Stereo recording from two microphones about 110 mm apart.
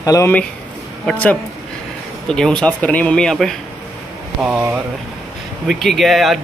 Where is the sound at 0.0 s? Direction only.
35° left (ahead or behind).